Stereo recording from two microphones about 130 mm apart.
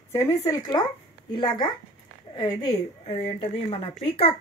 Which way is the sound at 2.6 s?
50° left (ahead or behind).